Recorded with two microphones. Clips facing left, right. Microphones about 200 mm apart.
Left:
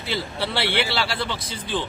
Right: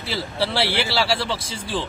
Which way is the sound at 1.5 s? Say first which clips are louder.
Even; 25° right (ahead or behind).